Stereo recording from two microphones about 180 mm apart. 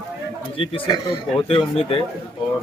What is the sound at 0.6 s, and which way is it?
A man's voice, 30° left (ahead or behind).